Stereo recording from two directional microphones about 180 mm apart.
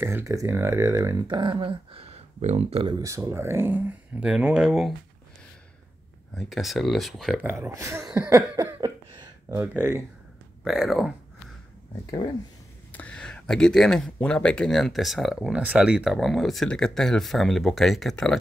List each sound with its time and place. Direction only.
0.0 s speech: 15° right (ahead or behind); by 3.0 s 30° right (ahead or behind)
3.0 s speech: 15° right (ahead or behind)
6.3 s speech: centre (ahead or behind)
7.5 s speech: 15° right (ahead or behind)
10.6 s speech: centre (ahead or behind)
12.9 s speech: 5° left (ahead or behind)